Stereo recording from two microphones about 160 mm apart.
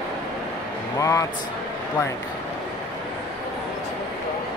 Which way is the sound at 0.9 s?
20° left (ahead or behind).